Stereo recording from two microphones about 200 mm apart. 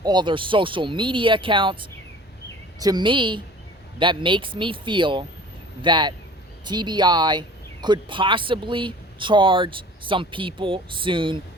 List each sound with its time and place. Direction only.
0.0 s speech: 20° right (ahead or behind)